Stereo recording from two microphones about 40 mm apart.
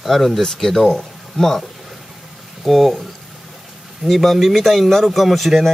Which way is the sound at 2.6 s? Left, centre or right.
Centre.